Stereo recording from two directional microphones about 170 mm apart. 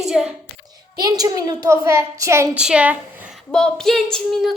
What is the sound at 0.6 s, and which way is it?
A woman's voice, 25° right (ahead or behind).